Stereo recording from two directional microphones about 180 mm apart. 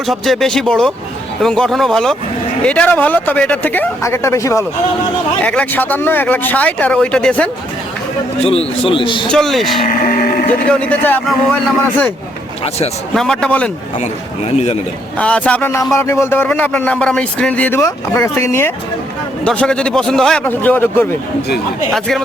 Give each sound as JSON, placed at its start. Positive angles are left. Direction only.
{"t": 0.1, "sound": "speech", "side_deg": 0}
{"t": 8.4, "sound": "a man's voice", "side_deg": 35}
{"t": 9.3, "sound": "speech", "side_deg": 0}
{"t": 9.8, "sound": "speech", "side_deg": 55}
{"t": 10.7, "sound": "speech", "side_deg": 5}
{"t": 13.1, "sound": "speech", "side_deg": 5}
{"t": 14.0, "sound": "a man's voice", "side_deg": 35}
{"t": 15.2, "sound": "speech", "side_deg": 5}